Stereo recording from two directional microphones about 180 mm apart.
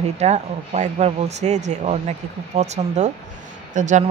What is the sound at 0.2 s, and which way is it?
A man's voice, 40° right (ahead or behind).